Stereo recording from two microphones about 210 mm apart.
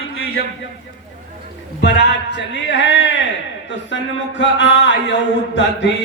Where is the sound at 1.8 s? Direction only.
55° left (ahead or behind).